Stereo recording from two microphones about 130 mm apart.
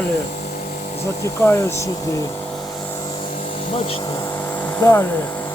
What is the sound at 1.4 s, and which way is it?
Speech, 20° left (ahead or behind).